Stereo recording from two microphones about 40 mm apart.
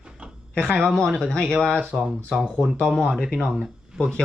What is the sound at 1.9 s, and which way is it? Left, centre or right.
Speech, centre.